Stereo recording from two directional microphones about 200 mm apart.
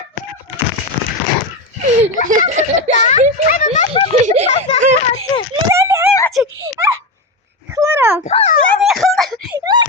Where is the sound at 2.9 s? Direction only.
35° left (ahead or behind).